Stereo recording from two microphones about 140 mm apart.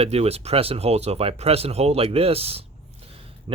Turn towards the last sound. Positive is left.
turn(degrees=-40)  # may be behind; listen again after turning